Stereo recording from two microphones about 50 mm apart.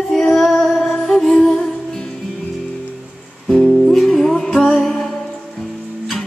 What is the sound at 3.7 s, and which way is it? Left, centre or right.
Music, centre.